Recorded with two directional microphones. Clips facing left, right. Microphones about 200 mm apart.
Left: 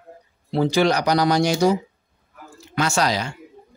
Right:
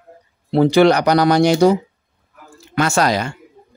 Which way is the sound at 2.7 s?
55° right (ahead or behind).